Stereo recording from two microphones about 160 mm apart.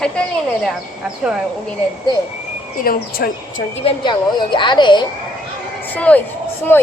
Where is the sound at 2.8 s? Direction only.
65° left (ahead or behind).